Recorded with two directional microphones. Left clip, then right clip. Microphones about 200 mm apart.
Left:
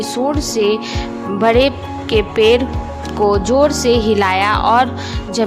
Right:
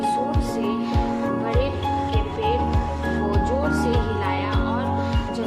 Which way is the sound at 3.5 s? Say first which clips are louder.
Left 10 dB; 55° left (ahead or behind).